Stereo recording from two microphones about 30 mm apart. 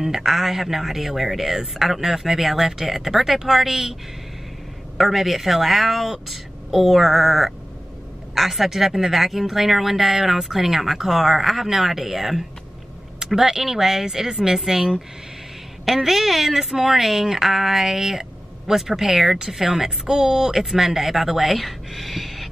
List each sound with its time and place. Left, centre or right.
0.0 s speech: centre
4.9 s speech: centre
13.5 s speech: centre
13.7 s speech: centre